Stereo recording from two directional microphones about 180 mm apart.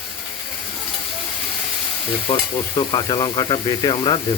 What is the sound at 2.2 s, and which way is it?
Speech, 25° left (ahead or behind).